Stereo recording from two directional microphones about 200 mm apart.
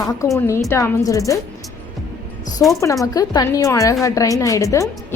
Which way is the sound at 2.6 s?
10° left (ahead or behind).